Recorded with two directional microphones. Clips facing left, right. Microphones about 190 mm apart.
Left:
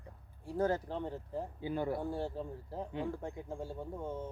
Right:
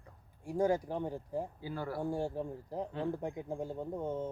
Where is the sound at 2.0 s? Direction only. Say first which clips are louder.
Right 3 dB; 15° right (ahead or behind).